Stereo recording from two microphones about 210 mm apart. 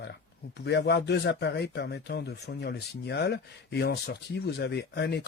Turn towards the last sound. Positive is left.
turn(degrees=55)  # may be behind; listen again after turning